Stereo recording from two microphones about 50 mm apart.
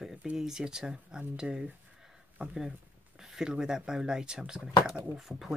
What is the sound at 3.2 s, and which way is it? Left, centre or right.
Speech, centre.